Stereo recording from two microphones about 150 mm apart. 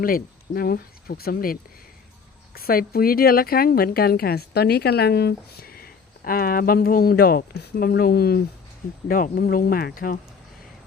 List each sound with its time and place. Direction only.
0.0 s speech: 75° left (ahead or behind)
2.6 s speech: 85° left
9.0 s speech: 70° left (ahead or behind)